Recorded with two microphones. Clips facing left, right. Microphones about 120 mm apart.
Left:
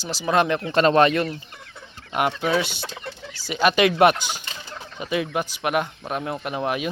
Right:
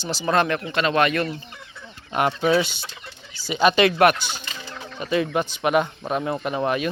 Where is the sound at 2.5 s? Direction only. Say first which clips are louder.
Right 3 dB; centre (ahead or behind).